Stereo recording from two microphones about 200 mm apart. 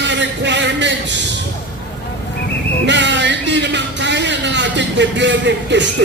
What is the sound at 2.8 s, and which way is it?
Speech, 65° right (ahead or behind).